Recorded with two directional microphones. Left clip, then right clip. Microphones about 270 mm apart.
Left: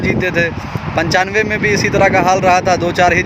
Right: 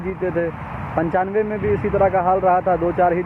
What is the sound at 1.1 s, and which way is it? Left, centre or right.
Speech, centre.